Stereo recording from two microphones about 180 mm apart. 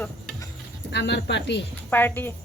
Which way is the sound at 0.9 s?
70° left (ahead or behind).